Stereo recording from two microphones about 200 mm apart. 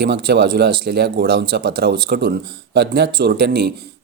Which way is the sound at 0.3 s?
55° right (ahead or behind).